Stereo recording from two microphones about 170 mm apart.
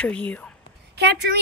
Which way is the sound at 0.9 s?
75° right (ahead or behind).